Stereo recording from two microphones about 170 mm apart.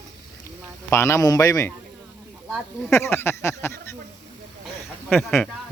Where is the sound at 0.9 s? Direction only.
15° left (ahead or behind).